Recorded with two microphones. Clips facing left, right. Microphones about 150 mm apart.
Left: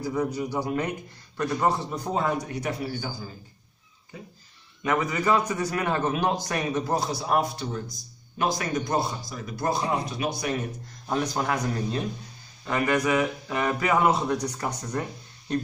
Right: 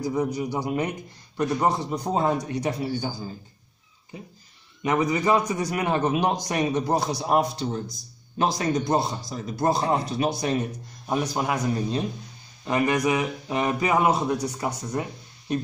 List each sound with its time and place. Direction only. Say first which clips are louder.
0.0 s a man's voice: right 2 dB; 15° right (ahead or behind)
4.8 s a man's voice: right 2 dB; 20° right (ahead or behind)
11.1 s a man's voice: right 1 dB; 15° right (ahead or behind)